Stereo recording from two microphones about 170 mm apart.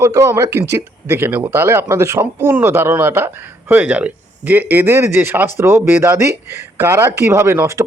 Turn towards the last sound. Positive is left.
turn(degrees=-15)  # may be behind; listen again after turning